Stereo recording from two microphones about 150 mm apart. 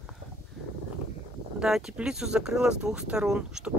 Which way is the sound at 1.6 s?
5° right (ahead or behind).